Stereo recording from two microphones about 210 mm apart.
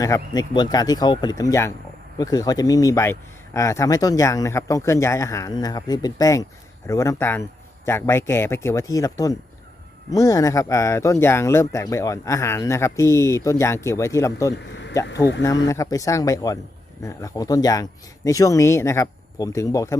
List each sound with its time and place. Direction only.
0.0 s speech: 15° left (ahead or behind)